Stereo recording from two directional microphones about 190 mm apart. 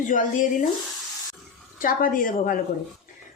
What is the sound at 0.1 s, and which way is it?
Speech, 40° left (ahead or behind).